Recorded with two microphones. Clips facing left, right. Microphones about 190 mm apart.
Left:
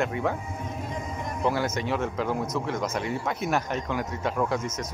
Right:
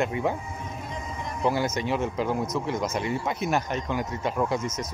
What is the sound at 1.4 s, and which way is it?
Speech, centre (ahead or behind).